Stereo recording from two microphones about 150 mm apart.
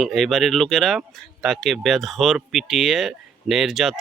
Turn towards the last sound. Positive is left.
turn(degrees=0)  # may be behind; listen again after turning